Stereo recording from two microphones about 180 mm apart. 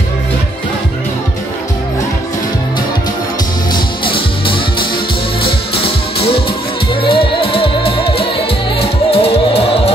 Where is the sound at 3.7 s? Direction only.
30° left (ahead or behind).